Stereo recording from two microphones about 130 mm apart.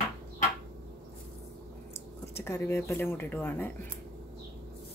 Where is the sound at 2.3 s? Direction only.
20° left (ahead or behind).